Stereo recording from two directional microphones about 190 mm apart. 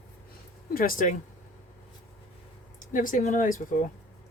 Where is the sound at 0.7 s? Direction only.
50° left (ahead or behind).